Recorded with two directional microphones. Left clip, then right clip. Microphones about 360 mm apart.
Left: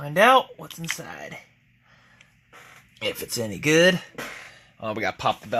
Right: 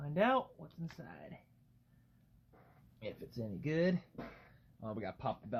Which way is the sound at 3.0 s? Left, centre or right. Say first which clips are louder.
Left 17 dB; left.